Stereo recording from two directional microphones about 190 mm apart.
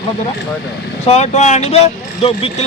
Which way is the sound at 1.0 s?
35° left (ahead or behind).